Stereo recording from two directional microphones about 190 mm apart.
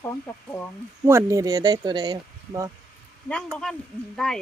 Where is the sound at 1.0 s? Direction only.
15° right (ahead or behind).